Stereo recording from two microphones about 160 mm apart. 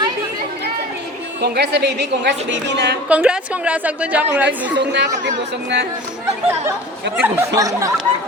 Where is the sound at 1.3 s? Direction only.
90° right.